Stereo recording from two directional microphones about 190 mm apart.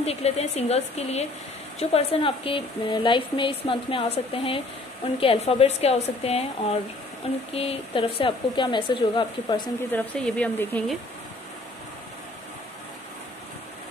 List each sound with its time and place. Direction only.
0.0 s speech: 35° left (ahead or behind)
7.5 s speech: 30° left (ahead or behind)
9.9 s speech: 5° left (ahead or behind)